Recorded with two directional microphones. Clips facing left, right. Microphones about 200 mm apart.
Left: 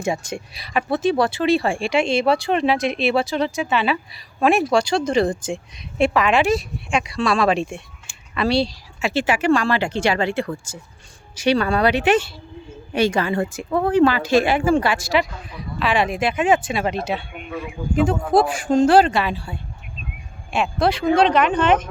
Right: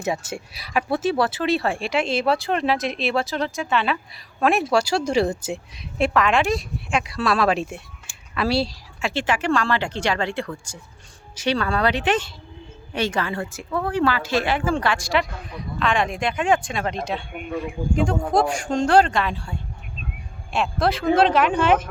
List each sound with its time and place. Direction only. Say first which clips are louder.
0.0 s speech: left 2 dB; 5° right (ahead or behind)
9.0 s speech: left 3 dB; 5° left (ahead or behind)